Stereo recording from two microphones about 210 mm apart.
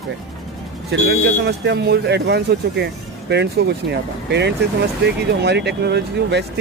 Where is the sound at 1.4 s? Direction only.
55° right (ahead or behind).